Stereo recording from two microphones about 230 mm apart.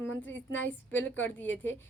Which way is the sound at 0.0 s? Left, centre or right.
Centre.